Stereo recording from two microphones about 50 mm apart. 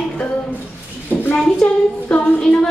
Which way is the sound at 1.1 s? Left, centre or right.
Left.